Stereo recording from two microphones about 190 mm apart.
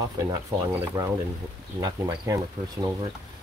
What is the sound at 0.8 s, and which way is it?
Speech, 15° right (ahead or behind).